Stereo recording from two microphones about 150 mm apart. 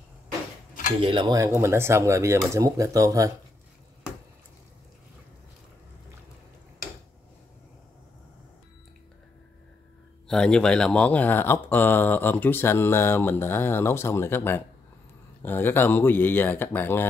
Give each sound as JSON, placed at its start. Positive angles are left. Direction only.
{"t": 1.0, "sound": "speech", "side_deg": -30}
{"t": 10.2, "sound": "speech", "side_deg": 5}